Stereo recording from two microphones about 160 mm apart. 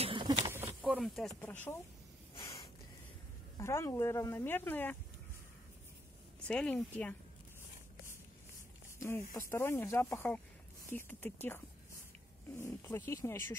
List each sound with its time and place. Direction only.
0.0 s a sound: 30° right (ahead or behind)
0.5 s a sound: 15° right (ahead or behind)
0.8 s speech: centre (ahead or behind)
1.4 s speech: 10° left (ahead or behind)
2.4 s snort: 20° left (ahead or behind)
3.5 s speech: 15° left (ahead or behind)
6.4 s a woman's voice: 5° left (ahead or behind)
9.3 s speech: 20° left (ahead or behind)